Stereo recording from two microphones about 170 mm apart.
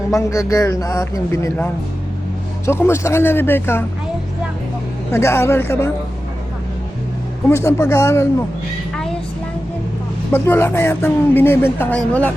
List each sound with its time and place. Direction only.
0.1 s speech: 15° left (ahead or behind)
5.1 s speech: 15° left (ahead or behind)
7.5 s speech: 15° left (ahead or behind)
10.3 s speech: 15° left (ahead or behind)